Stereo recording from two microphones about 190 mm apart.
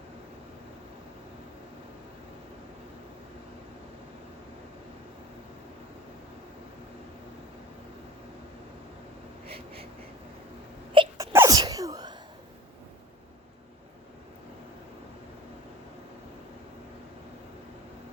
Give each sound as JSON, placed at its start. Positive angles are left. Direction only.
{"t": 10.9, "sound": "wail", "side_deg": -25}
{"t": 11.3, "sound": "sneeze", "side_deg": -15}